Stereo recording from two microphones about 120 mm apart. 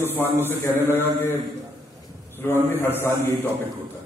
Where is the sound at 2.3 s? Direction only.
20° left (ahead or behind).